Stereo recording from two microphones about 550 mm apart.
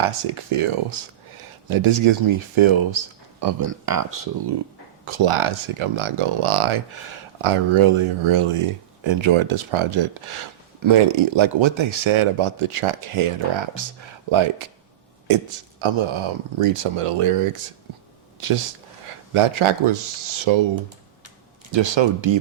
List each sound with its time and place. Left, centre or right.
0.1 s speech: right
3.4 s speech: right
5.0 s speech: right
19.0 s speech: right
21.7 s speech: right